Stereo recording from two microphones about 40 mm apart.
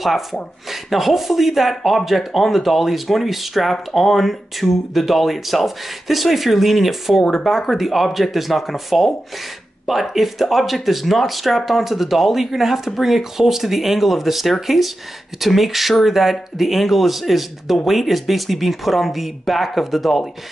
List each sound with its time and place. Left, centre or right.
0.0 s speech: centre